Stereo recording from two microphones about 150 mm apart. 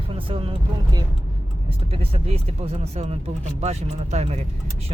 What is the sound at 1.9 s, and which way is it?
Speech, 40° right (ahead or behind).